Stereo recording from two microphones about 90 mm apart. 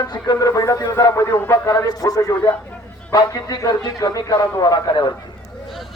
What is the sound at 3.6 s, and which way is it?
A man's voice, 40° left (ahead or behind).